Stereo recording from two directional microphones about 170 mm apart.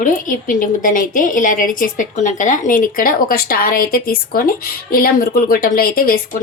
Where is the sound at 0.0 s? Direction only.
50° left (ahead or behind).